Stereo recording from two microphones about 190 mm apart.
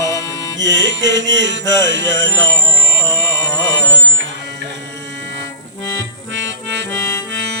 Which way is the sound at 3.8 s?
70° right (ahead or behind).